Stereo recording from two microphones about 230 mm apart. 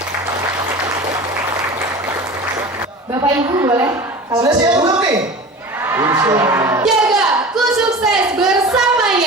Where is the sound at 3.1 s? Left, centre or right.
Centre.